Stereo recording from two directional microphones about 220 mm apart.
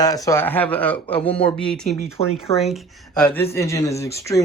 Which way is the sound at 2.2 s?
25° left (ahead or behind).